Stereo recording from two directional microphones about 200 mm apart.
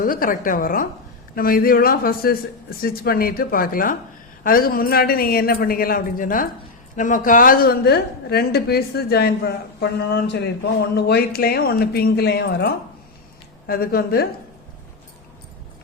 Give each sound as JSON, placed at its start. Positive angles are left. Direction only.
{"t": 0.0, "sound": "a woman's voice", "side_deg": 45}